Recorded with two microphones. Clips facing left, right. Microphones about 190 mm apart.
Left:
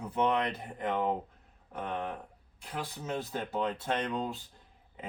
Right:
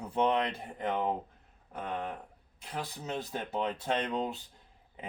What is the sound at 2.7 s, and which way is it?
Speech, 20° right (ahead or behind).